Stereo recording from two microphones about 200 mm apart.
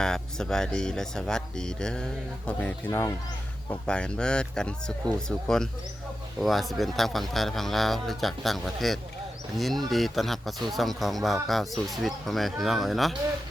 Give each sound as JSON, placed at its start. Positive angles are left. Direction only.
{"t": 0.0, "sound": "speech", "side_deg": 5}